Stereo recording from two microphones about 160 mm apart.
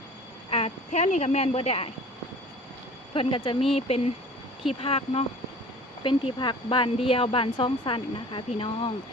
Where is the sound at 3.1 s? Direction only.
35° left (ahead or behind).